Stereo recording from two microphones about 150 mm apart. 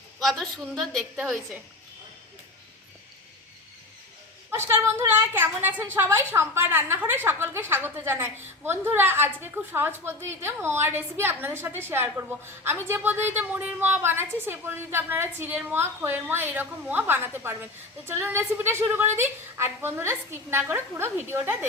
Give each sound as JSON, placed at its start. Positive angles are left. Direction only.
{"t": 0.2, "sound": "a woman's voice", "side_deg": 0}
{"t": 4.5, "sound": "a woman's voice", "side_deg": -15}